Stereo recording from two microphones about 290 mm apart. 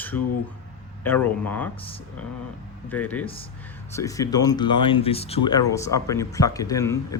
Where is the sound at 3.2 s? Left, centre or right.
Centre.